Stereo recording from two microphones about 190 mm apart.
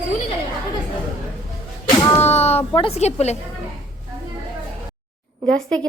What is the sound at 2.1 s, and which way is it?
A child's voice, 35° left (ahead or behind).